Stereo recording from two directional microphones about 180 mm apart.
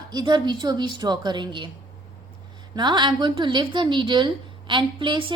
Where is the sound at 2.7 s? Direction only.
25° right (ahead or behind).